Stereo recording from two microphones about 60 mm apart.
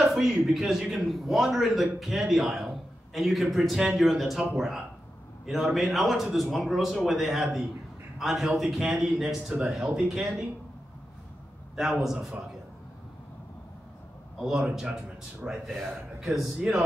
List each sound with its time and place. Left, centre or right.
0.0 s a man's voice: centre
9.5 s speech: right
9.9 s a man's voice: centre
11.7 s a man's voice: centre
14.4 s a man's voice: centre
15.6 s a man's voice: centre